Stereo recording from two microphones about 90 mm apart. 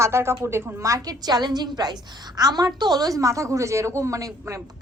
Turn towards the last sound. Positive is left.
turn(degrees=-35)  # may be behind; listen again after turning